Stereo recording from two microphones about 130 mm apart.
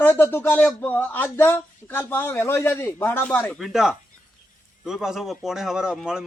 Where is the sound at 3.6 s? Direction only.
Centre (ahead or behind).